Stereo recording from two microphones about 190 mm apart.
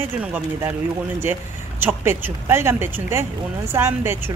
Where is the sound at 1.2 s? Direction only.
10° right (ahead or behind).